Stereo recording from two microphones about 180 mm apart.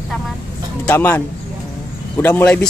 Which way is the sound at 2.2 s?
10° left (ahead or behind).